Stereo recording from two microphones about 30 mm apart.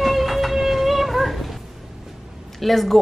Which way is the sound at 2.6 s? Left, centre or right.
Centre.